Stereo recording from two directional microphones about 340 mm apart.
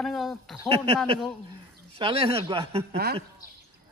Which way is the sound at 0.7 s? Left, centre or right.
Centre.